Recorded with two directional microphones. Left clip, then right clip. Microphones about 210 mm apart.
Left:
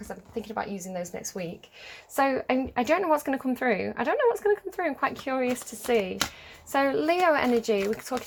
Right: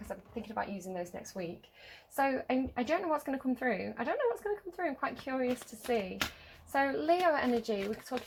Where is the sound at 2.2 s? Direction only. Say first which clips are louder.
Left 6 dB; 45° left (ahead or behind).